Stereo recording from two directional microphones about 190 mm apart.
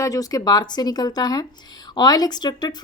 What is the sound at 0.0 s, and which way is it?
Speech, 20° left (ahead or behind).